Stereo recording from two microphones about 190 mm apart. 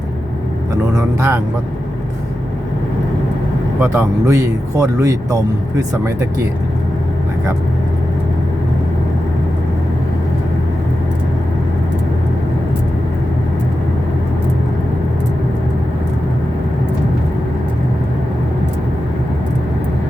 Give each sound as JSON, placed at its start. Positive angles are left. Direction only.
{"t": 0.9, "sound": "speech", "side_deg": -15}
{"t": 3.8, "sound": "speech", "side_deg": -15}